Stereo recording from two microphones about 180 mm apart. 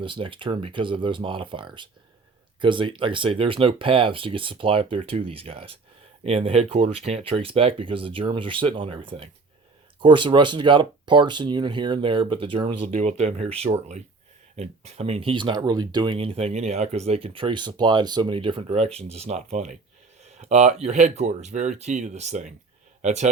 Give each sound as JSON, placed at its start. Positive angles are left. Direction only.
{"t": 0.0, "sound": "speech", "side_deg": -30}